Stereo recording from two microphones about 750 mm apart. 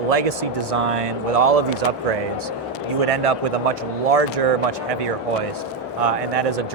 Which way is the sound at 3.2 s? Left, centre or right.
Right.